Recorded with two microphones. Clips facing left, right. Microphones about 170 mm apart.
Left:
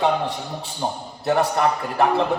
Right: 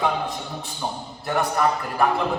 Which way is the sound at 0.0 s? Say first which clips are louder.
Left 3 dB; 30° left (ahead or behind).